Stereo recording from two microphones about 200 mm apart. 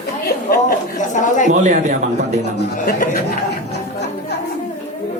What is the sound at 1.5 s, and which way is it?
Speech, 40° right (ahead or behind).